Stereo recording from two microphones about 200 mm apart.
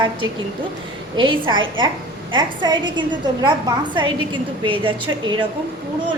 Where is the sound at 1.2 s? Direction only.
25° right (ahead or behind).